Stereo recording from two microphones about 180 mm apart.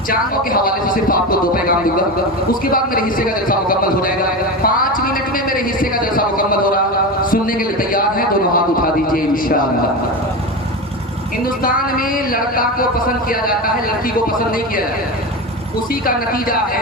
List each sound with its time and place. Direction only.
0.1 s speech: 50° left (ahead or behind)
8.5 s a sound: 50° left (ahead or behind)
11.6 s speech: 50° left (ahead or behind)
16.0 s speech: 50° left (ahead or behind)